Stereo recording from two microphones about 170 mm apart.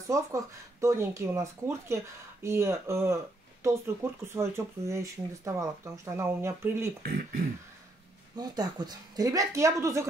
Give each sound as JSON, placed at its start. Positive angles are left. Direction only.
{"t": 0.1, "sound": "speech", "side_deg": -15}
{"t": 8.4, "sound": "speech", "side_deg": -25}